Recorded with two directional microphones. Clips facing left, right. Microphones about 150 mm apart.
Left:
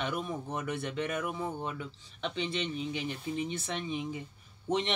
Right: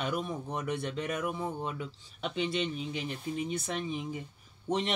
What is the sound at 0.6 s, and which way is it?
Speech, 5° left (ahead or behind).